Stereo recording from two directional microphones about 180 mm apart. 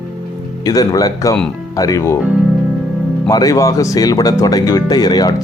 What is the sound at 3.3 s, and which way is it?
Speech, 20° left (ahead or behind).